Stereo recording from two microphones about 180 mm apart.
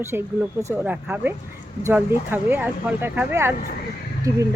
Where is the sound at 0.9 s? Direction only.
10° right (ahead or behind).